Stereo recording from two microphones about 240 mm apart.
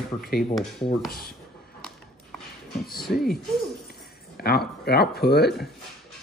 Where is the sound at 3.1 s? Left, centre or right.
Left.